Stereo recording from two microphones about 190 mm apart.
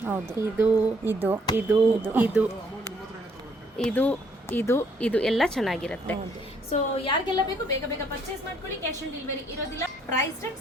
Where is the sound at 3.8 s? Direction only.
5° left (ahead or behind).